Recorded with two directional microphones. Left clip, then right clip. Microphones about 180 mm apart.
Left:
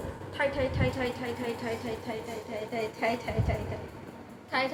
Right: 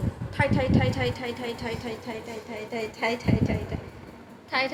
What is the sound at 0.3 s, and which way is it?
Speech, 50° right (ahead or behind).